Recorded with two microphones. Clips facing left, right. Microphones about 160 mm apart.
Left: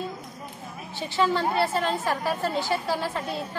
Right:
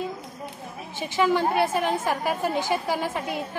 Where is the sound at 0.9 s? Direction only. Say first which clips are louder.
Right 2 dB; 15° right (ahead or behind).